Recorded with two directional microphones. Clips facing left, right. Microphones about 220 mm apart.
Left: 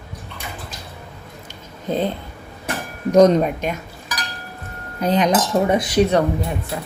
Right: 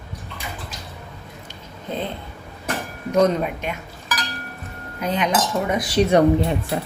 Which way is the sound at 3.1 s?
40° left (ahead or behind).